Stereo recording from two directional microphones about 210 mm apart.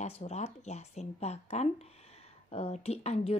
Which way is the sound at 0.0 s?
30° left (ahead or behind).